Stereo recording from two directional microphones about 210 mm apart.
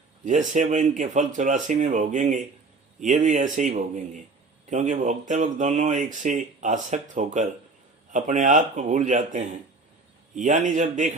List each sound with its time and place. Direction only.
0.3 s speech: 35° right (ahead or behind)